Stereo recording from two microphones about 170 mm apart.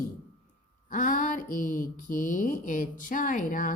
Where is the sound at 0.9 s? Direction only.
50° left (ahead or behind).